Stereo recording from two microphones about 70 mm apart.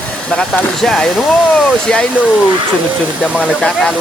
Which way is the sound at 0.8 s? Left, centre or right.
Centre.